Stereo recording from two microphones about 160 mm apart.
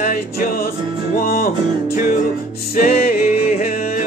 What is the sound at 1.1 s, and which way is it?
Music, 75° left (ahead or behind).